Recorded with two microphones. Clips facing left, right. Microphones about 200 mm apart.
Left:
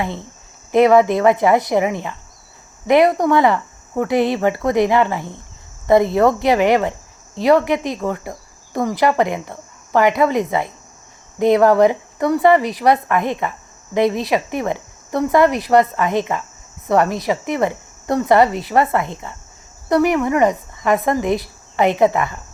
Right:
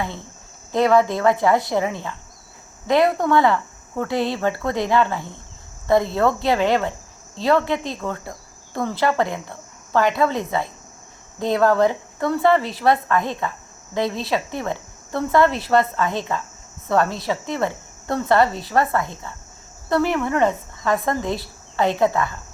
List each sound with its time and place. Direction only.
0.0 s speech: 20° left (ahead or behind)